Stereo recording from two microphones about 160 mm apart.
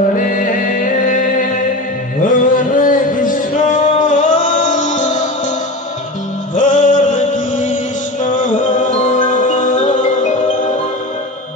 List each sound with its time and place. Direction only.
0.1 s music: 55° left (ahead or behind)
1.0 s a sound: 55° left (ahead or behind)
2.2 s music: 55° left (ahead or behind)
6.5 s music: 50° left (ahead or behind)